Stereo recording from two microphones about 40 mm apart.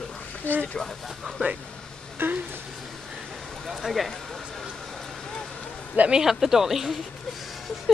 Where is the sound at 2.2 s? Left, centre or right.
Right.